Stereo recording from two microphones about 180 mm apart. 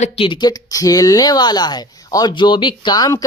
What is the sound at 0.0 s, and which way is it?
Speech, 30° left (ahead or behind).